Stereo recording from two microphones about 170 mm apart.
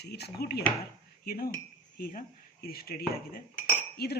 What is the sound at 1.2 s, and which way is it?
Cutlery, 60° left (ahead or behind).